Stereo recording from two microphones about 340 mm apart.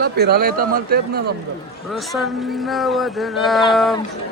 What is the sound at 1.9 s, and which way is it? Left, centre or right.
Speech, centre.